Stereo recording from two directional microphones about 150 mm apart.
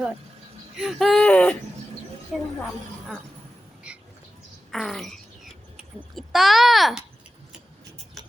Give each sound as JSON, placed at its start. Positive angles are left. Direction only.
{"t": 0.8, "sound": "speech", "side_deg": 0}
{"t": 3.9, "sound": "a sound", "side_deg": -5}
{"t": 4.7, "sound": "speech", "side_deg": 0}